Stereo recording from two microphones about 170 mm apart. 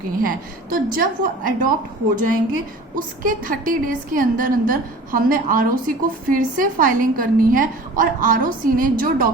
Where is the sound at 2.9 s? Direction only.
50° right (ahead or behind).